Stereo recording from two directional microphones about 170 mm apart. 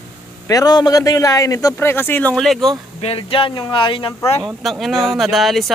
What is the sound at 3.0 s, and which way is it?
Speech, 35° left (ahead or behind).